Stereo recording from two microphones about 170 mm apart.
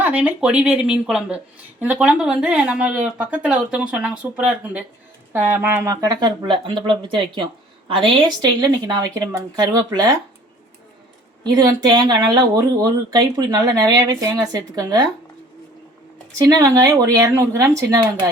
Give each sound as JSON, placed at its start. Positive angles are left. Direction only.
{"t": 0.0, "sound": "speech", "side_deg": -10}
{"t": 11.4, "sound": "speech", "side_deg": -25}
{"t": 16.4, "sound": "speech", "side_deg": -20}